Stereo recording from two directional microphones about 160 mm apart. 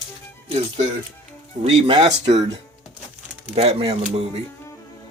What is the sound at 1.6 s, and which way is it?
Speech, 30° right (ahead or behind).